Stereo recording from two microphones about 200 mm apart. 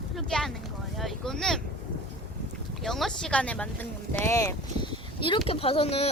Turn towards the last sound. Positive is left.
turn(degrees=30)  # may be behind; listen again after turning